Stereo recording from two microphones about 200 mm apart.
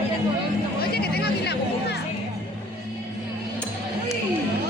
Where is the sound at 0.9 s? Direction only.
50° left (ahead or behind).